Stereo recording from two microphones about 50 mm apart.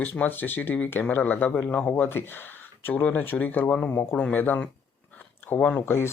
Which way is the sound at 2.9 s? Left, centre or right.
Left.